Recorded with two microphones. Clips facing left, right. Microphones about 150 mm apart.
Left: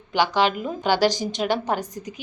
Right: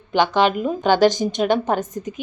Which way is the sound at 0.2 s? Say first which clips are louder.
Right 3 dB; 20° right (ahead or behind).